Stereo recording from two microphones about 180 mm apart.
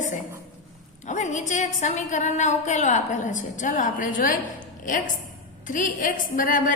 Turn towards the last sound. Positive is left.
turn(degrees=50)  # may be behind; listen again after turning